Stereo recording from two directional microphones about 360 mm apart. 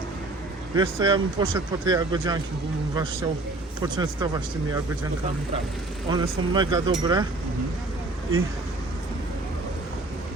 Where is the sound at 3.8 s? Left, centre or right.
Centre.